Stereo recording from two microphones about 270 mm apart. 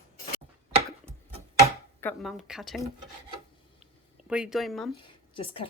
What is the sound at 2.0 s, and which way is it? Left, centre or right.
Speech, centre.